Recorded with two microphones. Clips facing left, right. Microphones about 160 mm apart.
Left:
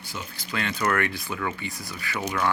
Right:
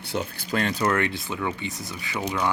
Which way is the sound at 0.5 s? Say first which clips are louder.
Right 3 dB; 35° right (ahead or behind).